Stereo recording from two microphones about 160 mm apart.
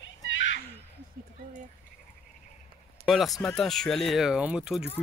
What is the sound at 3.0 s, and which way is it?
Speech, centre (ahead or behind).